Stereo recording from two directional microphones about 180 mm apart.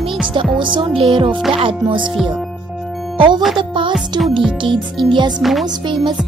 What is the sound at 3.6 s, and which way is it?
Music, 25° right (ahead or behind).